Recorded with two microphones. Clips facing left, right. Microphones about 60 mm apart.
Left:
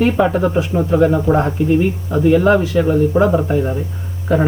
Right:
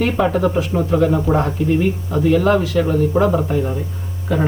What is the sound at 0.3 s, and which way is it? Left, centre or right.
Speech, centre.